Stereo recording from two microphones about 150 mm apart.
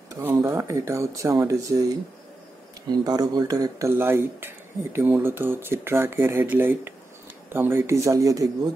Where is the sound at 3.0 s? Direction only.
25° right (ahead or behind).